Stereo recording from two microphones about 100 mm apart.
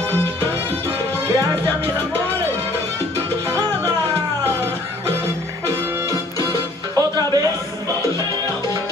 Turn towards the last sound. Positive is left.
turn(degrees=-40)  # may be behind; listen again after turning